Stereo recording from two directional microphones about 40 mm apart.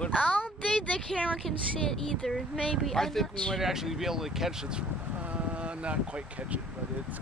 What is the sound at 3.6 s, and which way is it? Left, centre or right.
Speech, centre.